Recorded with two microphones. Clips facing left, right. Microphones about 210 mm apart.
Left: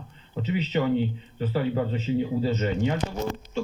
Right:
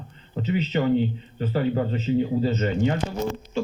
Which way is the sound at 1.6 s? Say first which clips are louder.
Right 2 dB; 5° left (ahead or behind).